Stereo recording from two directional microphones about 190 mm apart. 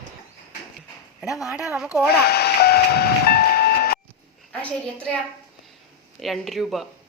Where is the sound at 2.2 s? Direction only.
55° left (ahead or behind).